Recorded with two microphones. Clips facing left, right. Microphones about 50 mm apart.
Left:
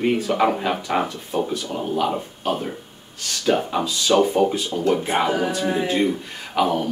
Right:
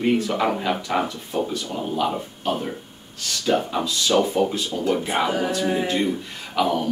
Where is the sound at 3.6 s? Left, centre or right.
Centre.